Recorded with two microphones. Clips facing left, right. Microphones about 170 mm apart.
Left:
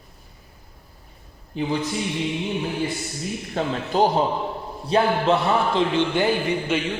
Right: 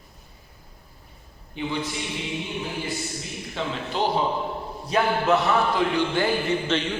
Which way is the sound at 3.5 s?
45° left (ahead or behind).